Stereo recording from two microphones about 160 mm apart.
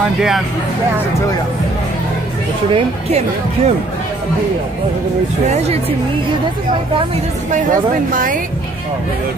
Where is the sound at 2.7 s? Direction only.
40° right (ahead or behind).